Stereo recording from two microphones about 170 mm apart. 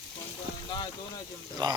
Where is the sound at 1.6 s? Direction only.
25° right (ahead or behind).